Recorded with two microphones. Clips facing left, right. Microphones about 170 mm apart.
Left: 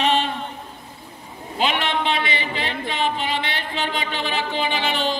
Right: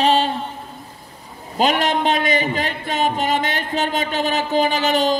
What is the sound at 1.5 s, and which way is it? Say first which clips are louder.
A man's voice: right 5 dB; 40° right (ahead or behind).